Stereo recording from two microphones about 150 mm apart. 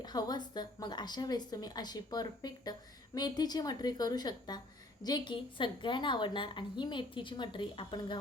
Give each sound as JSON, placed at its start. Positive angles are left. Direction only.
{"t": 0.0, "sound": "a woman's voice", "side_deg": 25}